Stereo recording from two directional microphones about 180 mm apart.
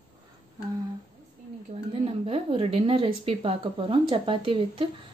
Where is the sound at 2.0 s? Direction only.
35° right (ahead or behind).